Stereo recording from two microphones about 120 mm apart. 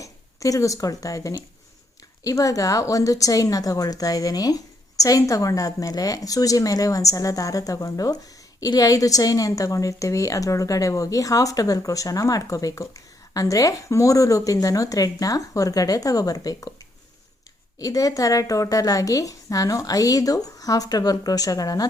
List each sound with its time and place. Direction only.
0.0 s a woman's voice: 30° left (ahead or behind)
17.7 s a woman's voice: 30° left (ahead or behind)